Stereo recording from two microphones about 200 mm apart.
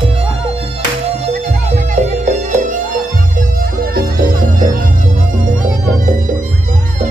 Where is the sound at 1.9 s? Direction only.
40° right (ahead or behind).